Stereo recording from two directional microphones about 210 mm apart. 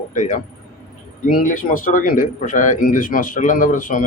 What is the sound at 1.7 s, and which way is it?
A man's voice, 40° left (ahead or behind).